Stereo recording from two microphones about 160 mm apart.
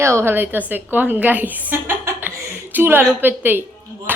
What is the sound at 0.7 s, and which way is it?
Chuckle, 10° right (ahead or behind).